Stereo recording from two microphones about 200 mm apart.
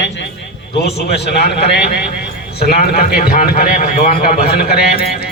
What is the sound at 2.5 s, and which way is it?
A man's voice, 50° left (ahead or behind).